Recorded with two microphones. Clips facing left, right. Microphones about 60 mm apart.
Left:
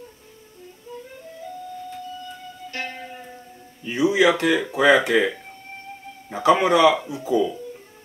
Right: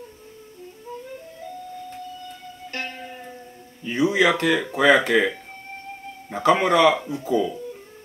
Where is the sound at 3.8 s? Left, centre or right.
Right.